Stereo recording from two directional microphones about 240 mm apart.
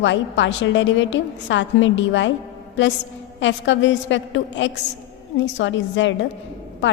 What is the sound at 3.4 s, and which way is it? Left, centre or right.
A woman's voice, left.